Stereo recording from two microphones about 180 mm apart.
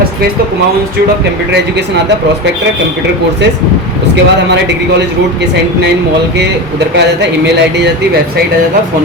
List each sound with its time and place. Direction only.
4.1 s speech: 70° right (ahead or behind)
6.3 s speech: 70° right (ahead or behind)